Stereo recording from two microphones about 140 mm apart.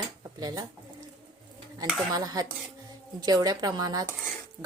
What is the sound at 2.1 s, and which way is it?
Speech, 25° right (ahead or behind).